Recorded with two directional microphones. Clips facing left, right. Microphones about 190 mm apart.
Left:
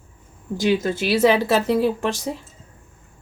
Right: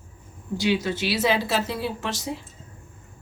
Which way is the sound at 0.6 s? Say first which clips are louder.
Left 4 dB; 45° left (ahead or behind).